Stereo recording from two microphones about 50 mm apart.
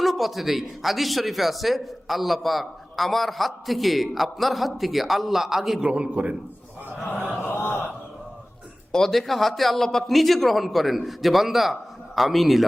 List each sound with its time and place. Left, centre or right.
0.0 s a man's voice: centre
5.8 s a man's voice: right
7.3 s a sound: left
8.9 s a man's voice: centre